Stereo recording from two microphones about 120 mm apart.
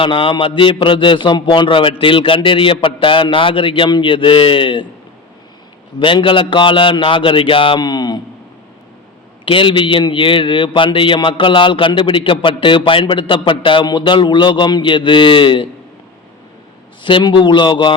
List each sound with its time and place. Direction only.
0.0 s a man's voice: 45° left (ahead or behind)
6.0 s a man's voice: 45° left (ahead or behind)
9.5 s a man's voice: 45° left (ahead or behind)
17.0 s a man's voice: 45° left (ahead or behind)